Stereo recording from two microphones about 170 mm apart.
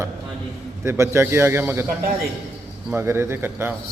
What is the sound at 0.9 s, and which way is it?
A man's voice, 15° right (ahead or behind).